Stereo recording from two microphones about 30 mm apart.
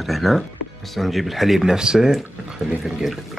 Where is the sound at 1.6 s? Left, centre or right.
Right.